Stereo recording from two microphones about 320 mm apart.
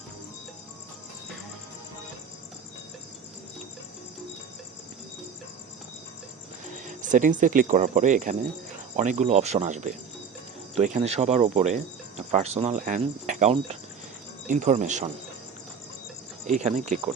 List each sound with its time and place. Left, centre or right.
6.7 s speech: right
16.5 s speech: right